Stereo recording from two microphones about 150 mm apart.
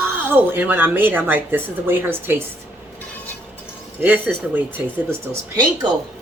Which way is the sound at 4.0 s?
10° right (ahead or behind).